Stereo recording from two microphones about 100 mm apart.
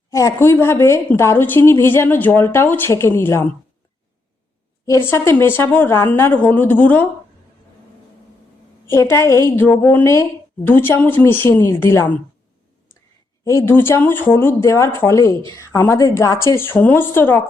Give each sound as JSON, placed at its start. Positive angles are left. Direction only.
{"t": 0.1, "sound": "a woman's voice", "side_deg": 30}
{"t": 4.9, "sound": "a woman's voice", "side_deg": 25}
{"t": 8.9, "sound": "a woman's voice", "side_deg": 25}
{"t": 13.4, "sound": "a woman's voice", "side_deg": 25}
{"t": 16.0, "sound": "a woman's voice", "side_deg": 30}